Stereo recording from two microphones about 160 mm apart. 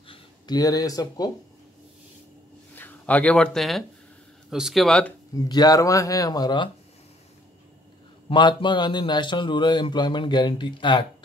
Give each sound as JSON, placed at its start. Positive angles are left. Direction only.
{"t": 0.1, "sound": "speech", "side_deg": 25}
{"t": 2.7, "sound": "speech", "side_deg": 10}
{"t": 5.3, "sound": "speech", "side_deg": 25}
{"t": 8.3, "sound": "speech", "side_deg": 30}